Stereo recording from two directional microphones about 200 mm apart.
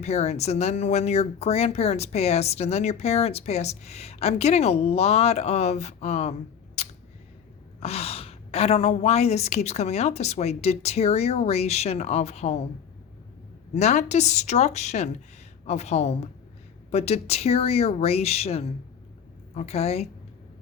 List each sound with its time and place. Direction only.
0.0 s speech: 35° left (ahead or behind)
6.8 s a sound: 30° left (ahead or behind)
7.8 s speech: 30° left (ahead or behind)
13.7 s speech: 35° left (ahead or behind)